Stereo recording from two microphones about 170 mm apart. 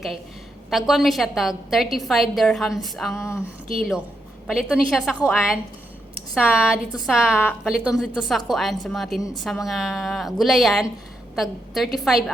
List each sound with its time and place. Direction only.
0.7 s a woman's voice: centre (ahead or behind)
3.2 s a sound: 15° left (ahead or behind)
3.8 s a woman's voice: centre (ahead or behind)